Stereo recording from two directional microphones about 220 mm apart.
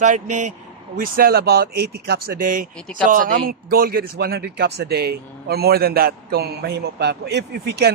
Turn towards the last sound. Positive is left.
turn(degrees=-50)  # may be behind; listen again after turning